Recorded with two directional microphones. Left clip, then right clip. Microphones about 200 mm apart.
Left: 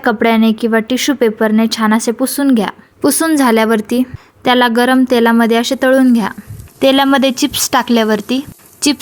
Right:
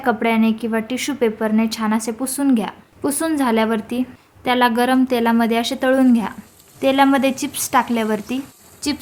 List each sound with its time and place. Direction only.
0.0 s a woman's voice: 30° left (ahead or behind)
8.8 s a woman's voice: 40° left (ahead or behind)